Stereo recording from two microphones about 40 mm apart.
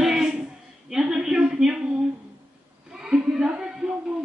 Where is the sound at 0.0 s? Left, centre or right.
Centre.